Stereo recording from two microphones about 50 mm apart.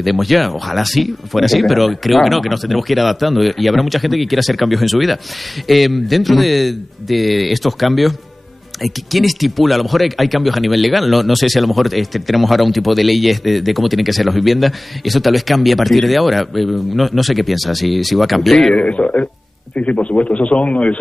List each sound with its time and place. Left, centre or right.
0.0 s speech: centre
18.8 s a man's voice: left